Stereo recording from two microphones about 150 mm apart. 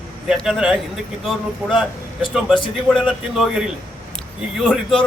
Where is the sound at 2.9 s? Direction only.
5° right (ahead or behind).